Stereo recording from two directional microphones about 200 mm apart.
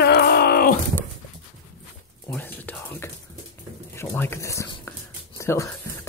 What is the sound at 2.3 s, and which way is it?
Whispering, 10° left (ahead or behind).